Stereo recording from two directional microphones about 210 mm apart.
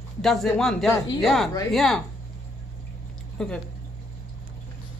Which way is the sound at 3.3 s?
5° left (ahead or behind).